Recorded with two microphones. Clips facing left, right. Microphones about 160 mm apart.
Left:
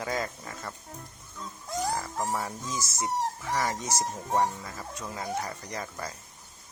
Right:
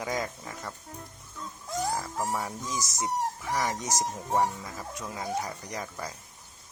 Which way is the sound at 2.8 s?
15° right (ahead or behind).